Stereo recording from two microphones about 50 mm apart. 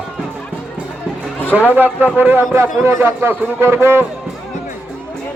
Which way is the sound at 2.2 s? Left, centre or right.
Right.